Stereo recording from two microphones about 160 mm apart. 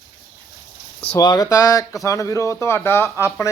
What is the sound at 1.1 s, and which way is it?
A man's voice, 25° left (ahead or behind).